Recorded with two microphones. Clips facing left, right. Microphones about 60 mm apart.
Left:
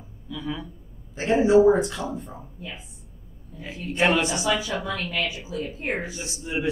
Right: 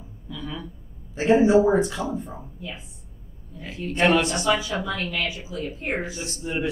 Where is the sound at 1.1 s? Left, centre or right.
Centre.